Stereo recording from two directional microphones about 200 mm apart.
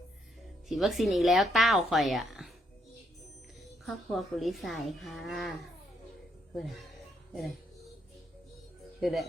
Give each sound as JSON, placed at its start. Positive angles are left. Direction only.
{"t": 0.7, "sound": "a woman's voice", "side_deg": 0}
{"t": 3.8, "sound": "a woman's voice", "side_deg": 0}
{"t": 6.6, "sound": "a woman's voice", "side_deg": 0}
{"t": 9.0, "sound": "speech", "side_deg": 0}